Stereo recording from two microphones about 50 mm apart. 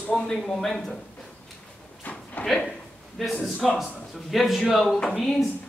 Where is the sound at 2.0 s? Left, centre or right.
Left.